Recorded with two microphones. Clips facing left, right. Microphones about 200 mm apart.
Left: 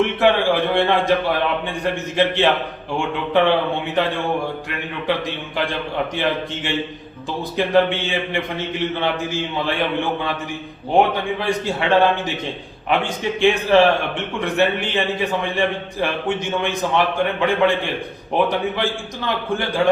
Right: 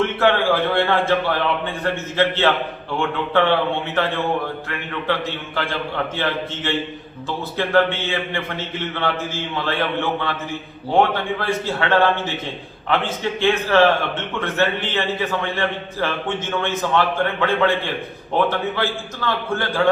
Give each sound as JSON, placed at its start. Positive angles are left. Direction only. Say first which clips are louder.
{"t": 0.0, "sound": "a man's voice", "louder": "left 1 dB", "side_deg": 15}
{"t": 5.0, "sound": "a man's voice", "louder": "left 1 dB", "side_deg": 15}